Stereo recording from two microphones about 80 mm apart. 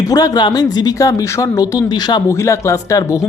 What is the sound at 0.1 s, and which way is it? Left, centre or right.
Speech, left.